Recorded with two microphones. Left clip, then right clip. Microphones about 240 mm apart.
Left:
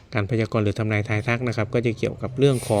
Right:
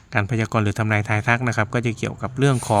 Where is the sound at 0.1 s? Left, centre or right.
Centre.